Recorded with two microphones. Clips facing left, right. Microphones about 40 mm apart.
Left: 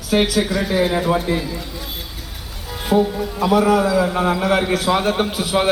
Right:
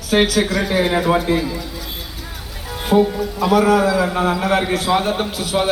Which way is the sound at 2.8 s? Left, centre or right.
Centre.